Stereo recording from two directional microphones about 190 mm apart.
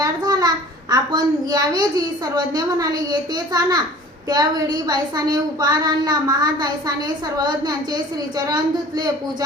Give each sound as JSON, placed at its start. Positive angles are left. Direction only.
{"t": 0.0, "sound": "a child's voice", "side_deg": -20}